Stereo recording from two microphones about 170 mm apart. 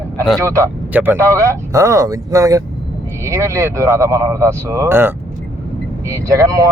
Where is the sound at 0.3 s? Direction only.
20° right (ahead or behind).